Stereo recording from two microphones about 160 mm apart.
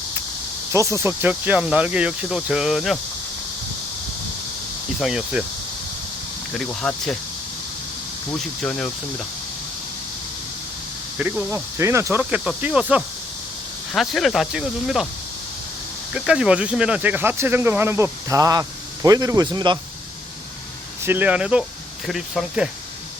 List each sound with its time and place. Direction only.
0.7 s speech: 20° right (ahead or behind); by 3.0 s centre (ahead or behind)
4.9 s speech: 5° right (ahead or behind)
6.6 s speech: 5° left (ahead or behind)
8.3 s speech: 5° left (ahead or behind)
11.2 s speech: 10° right (ahead or behind)
16.1 s speech: 5° right (ahead or behind); by 19.8 s 25° right (ahead or behind)
21.0 s speech: 10° right (ahead or behind)